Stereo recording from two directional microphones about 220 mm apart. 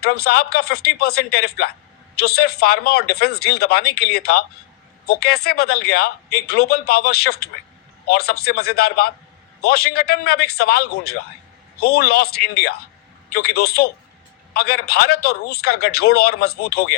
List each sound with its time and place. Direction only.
0.0 s a man's voice: 45° left (ahead or behind)